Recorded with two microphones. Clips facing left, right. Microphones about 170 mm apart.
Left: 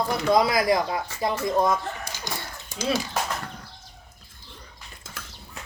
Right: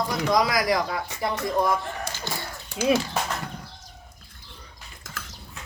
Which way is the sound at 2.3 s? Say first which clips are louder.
Left 1 dB; 15° left (ahead or behind).